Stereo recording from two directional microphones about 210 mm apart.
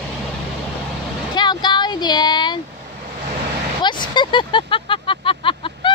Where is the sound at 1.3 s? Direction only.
20° left (ahead or behind).